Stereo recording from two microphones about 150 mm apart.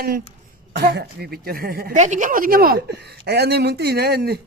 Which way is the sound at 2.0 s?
55° right (ahead or behind).